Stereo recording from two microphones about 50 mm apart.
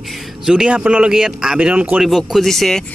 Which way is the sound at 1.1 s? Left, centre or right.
Centre.